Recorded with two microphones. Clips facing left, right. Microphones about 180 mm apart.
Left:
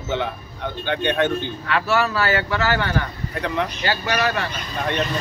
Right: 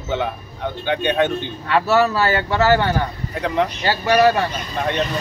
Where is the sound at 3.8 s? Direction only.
30° right (ahead or behind).